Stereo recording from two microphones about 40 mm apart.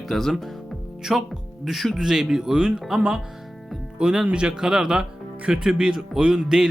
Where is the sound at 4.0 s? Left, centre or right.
Right.